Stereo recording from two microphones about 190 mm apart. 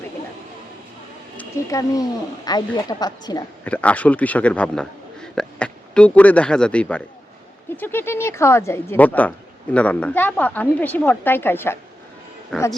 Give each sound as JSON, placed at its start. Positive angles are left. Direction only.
{"t": 1.4, "sound": "speech", "side_deg": 15}
{"t": 3.6, "sound": "a woman's voice", "side_deg": 5}